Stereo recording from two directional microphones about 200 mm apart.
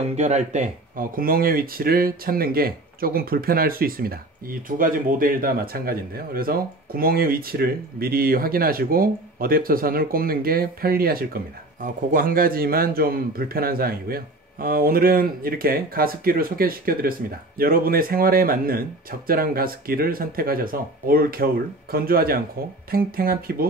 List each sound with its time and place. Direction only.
0.0 s speech: 35° right (ahead or behind)